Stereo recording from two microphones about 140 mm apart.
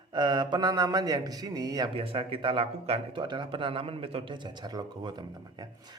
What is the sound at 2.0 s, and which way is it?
A man's voice, 40° right (ahead or behind).